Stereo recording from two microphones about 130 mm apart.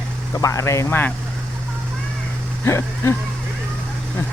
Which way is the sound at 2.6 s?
20° left (ahead or behind).